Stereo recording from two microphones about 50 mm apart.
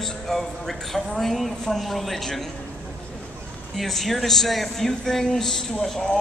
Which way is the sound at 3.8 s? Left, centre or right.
Centre.